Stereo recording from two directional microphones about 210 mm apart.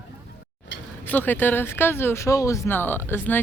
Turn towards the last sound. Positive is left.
turn(degrees=10)  # may be behind; listen again after turning